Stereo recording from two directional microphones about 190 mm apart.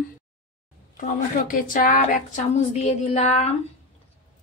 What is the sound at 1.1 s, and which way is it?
A woman's voice, 45° left (ahead or behind).